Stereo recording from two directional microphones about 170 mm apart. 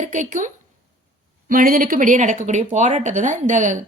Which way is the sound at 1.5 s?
55° right (ahead or behind).